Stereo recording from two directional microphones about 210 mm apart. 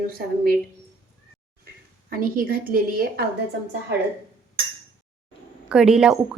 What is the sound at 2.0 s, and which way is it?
A woman's voice, 40° right (ahead or behind).